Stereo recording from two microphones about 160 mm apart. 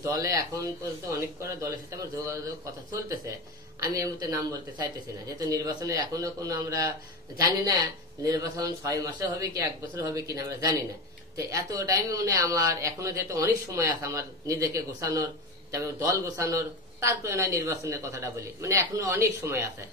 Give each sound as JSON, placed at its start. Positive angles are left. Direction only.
{"t": 0.0, "sound": "a man's voice", "side_deg": -20}
{"t": 8.2, "sound": "a man's voice", "side_deg": -25}